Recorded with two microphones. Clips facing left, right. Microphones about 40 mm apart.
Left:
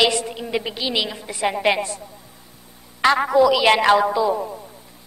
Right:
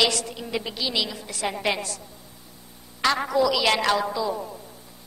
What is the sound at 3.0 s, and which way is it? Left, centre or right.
A woman's voice, left.